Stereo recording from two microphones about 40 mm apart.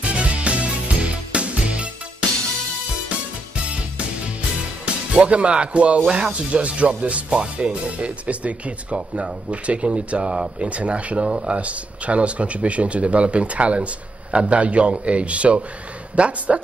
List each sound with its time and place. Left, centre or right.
0.0 s music: right
4.8 s speech: right